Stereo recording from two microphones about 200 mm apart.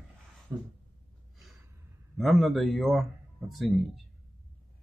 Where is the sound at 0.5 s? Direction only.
20° right (ahead or behind).